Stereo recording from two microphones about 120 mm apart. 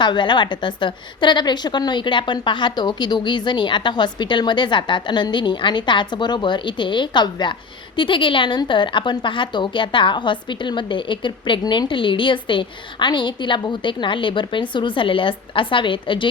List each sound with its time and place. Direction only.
0.0 s a woman's voice: 40° left (ahead or behind)